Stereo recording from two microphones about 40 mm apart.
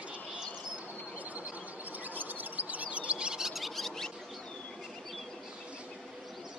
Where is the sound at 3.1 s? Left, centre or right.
Right.